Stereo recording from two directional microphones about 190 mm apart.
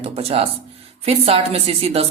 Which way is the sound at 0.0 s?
30° right (ahead or behind).